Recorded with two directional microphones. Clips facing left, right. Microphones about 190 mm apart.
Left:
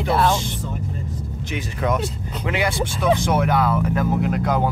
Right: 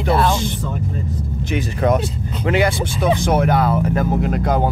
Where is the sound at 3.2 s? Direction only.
35° right (ahead or behind).